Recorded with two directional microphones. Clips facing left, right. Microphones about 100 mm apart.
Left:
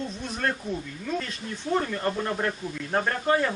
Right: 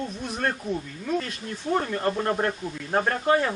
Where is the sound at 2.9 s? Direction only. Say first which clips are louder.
Right 2 dB; 5° right (ahead or behind).